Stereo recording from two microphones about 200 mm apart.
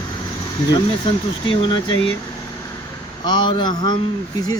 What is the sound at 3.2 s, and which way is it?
Speech, 20° left (ahead or behind).